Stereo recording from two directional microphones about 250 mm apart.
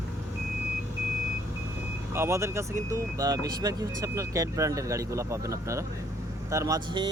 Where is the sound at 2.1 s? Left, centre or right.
Centre.